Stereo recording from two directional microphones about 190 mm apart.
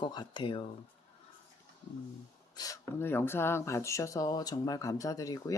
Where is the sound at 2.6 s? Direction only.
15° left (ahead or behind).